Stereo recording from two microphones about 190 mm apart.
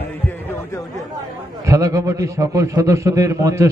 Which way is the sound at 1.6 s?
15° right (ahead or behind).